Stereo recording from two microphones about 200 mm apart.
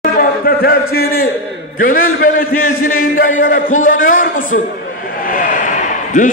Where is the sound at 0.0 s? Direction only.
45° left (ahead or behind).